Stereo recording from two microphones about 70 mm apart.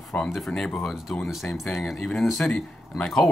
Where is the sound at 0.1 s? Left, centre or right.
Centre.